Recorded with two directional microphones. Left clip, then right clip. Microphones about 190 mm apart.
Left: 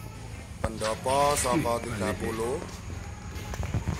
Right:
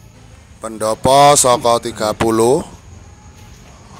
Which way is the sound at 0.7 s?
40° right (ahead or behind).